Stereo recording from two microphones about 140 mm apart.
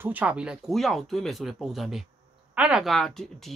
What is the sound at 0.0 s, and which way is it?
Speech, 10° right (ahead or behind).